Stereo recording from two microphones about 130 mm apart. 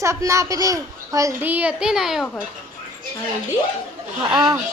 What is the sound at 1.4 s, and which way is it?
A child's voice, 10° right (ahead or behind).